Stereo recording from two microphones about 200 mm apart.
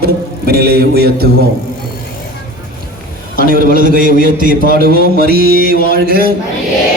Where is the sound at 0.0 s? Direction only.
50° right (ahead or behind).